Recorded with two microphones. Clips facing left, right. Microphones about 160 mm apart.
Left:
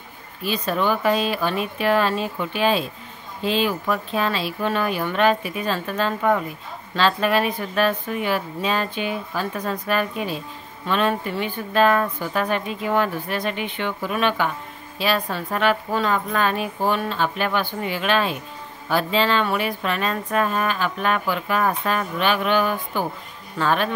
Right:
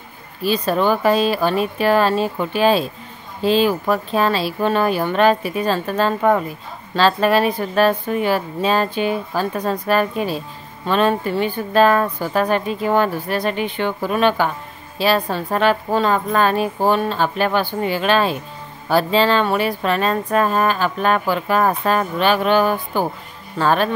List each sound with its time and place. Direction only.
0.4 s speech: 35° right (ahead or behind)